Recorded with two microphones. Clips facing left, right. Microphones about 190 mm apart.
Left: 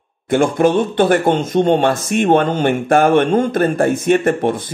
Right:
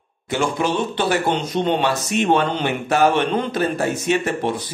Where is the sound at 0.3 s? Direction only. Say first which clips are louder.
Left 7 dB; 50° left (ahead or behind).